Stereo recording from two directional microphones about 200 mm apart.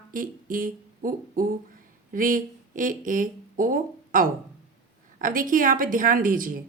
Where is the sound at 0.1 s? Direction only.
45° right (ahead or behind).